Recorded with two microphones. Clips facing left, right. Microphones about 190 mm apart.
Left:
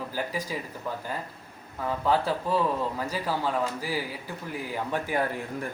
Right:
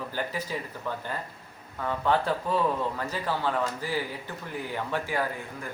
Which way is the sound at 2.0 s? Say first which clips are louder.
Even; 5° left (ahead or behind).